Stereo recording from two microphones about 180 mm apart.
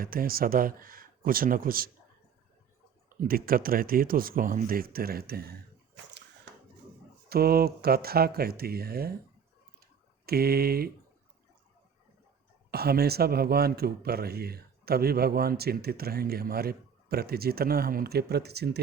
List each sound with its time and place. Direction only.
0.0 s speech: 55° right (ahead or behind)
3.1 s speech: 55° right (ahead or behind)
7.3 s speech: 60° right (ahead or behind)
9.8 s a sound: 60° right (ahead or behind)
12.7 s speech: 60° right (ahead or behind)